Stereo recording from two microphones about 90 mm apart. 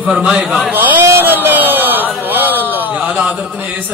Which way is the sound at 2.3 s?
20° right (ahead or behind).